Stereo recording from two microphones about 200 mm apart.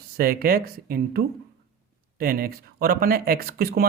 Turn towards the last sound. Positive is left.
turn(degrees=-50)  # may be behind; listen again after turning